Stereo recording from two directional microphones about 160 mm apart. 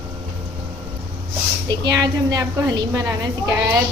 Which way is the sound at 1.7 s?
25° right (ahead or behind).